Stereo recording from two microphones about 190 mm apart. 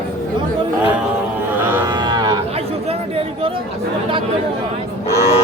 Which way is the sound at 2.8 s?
30° right (ahead or behind).